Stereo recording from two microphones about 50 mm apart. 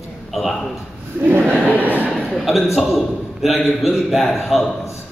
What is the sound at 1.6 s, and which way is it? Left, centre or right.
Speech, left.